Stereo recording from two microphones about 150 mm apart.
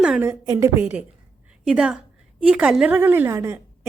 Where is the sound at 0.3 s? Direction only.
20° right (ahead or behind).